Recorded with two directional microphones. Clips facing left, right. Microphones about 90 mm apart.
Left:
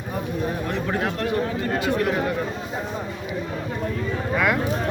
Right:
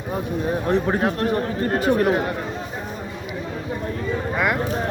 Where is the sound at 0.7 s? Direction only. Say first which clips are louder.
Right 5 dB; 35° right (ahead or behind).